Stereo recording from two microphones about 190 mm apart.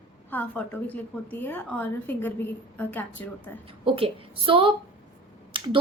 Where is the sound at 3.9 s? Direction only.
30° right (ahead or behind).